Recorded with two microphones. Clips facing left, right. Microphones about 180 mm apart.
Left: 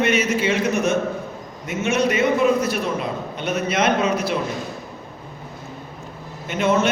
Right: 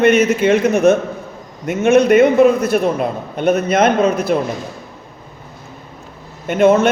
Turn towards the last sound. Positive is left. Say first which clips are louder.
# right 8 dB
turn(degrees=-55)  # may be behind; listen again after turning